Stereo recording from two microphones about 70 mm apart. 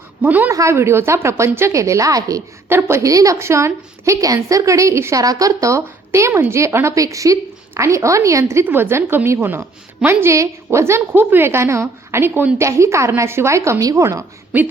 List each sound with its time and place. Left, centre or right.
0.2 s speech: right
0.5 s a woman's voice: right
1.7 s a woman's voice: right
2.6 s a woman's voice: right
3.0 s a woman's voice: right
3.3 s a woman's voice: right
5.1 s a woman's voice: right
6.9 s a woman's voice: right
8.6 s a woman's voice: right
10.3 s a woman's voice: right
14.5 s speech: right